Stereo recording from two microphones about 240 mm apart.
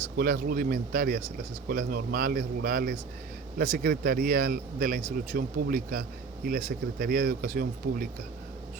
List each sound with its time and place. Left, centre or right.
0.2 s speech: right